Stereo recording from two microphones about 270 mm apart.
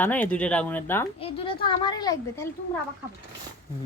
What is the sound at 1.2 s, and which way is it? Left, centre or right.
Speech, centre.